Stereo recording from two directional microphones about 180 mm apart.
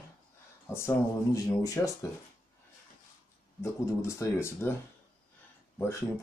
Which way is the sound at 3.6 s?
15° left (ahead or behind).